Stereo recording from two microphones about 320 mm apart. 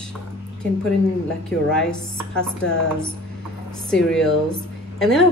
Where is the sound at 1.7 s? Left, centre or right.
Centre.